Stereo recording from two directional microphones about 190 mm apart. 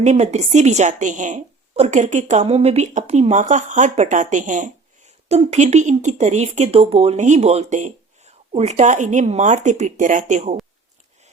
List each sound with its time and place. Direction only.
0.0 s a woman's voice: 35° right (ahead or behind)